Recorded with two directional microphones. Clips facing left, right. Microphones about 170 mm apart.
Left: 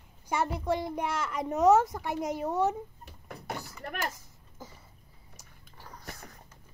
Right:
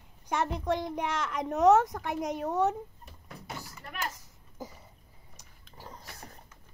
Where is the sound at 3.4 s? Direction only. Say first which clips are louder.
Left 5 dB; 55° left (ahead or behind).